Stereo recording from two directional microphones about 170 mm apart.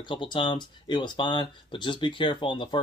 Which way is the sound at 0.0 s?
30° left (ahead or behind).